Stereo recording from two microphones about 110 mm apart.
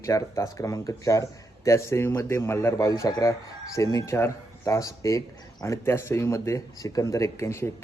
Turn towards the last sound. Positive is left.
turn(degrees=25)  # may be behind; listen again after turning